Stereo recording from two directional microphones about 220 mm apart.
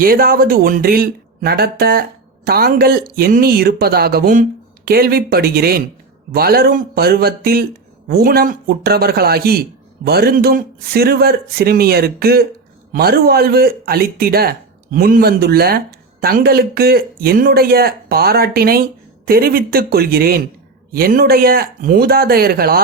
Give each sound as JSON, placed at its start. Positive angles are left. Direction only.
{"t": 0.0, "sound": "speech", "side_deg": -40}